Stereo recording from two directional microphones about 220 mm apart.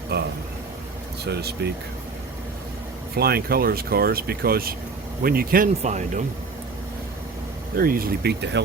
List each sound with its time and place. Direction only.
0.1 s speech: 50° right (ahead or behind)
3.2 s speech: 45° right (ahead or behind)
7.8 s speech: 40° right (ahead or behind)